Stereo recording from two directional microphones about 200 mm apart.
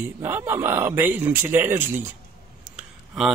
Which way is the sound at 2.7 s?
5° right (ahead or behind).